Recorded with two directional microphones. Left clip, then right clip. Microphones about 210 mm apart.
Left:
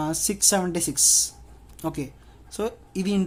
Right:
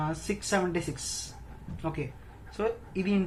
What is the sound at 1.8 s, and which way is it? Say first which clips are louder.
Speech: left 4 dB; 55° left (ahead or behind).